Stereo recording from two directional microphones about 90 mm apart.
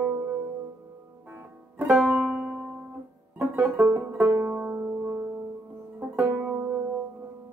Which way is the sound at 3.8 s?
15° right (ahead or behind).